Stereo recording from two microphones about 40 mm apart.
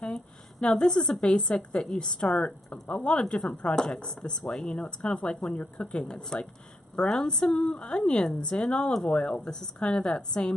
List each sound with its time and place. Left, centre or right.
0.0 s a woman's voice: left